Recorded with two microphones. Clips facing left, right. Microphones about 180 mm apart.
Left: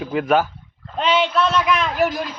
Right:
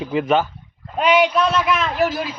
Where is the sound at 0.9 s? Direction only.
10° right (ahead or behind).